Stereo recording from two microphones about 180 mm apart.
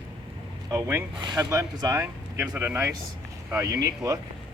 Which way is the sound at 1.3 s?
15° right (ahead or behind).